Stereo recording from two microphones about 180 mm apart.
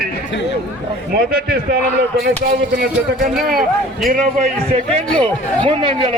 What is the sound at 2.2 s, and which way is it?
Speech, 60° right (ahead or behind).